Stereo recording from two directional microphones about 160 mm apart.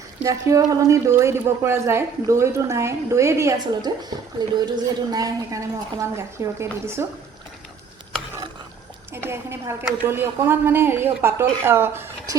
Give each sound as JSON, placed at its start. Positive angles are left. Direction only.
{"t": 0.2, "sound": "a woman's voice", "side_deg": -20}
{"t": 9.1, "sound": "speech", "side_deg": -15}